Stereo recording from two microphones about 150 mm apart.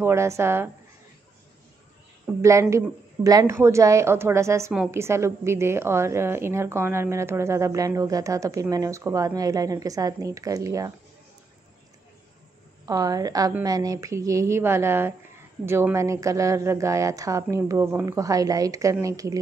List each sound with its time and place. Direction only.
0.0 s speech: 20° right (ahead or behind)
2.4 s a woman's voice: 20° right (ahead or behind)
12.8 s a woman's voice: 25° right (ahead or behind)